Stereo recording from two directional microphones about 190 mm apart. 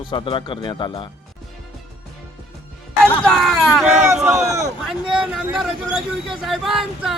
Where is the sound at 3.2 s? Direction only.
Centre (ahead or behind).